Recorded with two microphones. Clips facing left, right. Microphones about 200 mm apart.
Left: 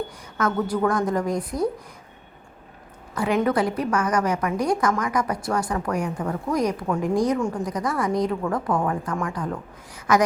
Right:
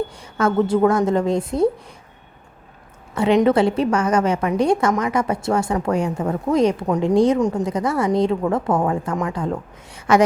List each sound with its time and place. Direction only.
0.2 s a woman's voice: 30° right (ahead or behind)
3.2 s a woman's voice: 25° right (ahead or behind)